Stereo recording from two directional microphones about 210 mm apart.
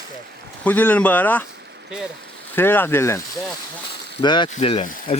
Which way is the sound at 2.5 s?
10° left (ahead or behind).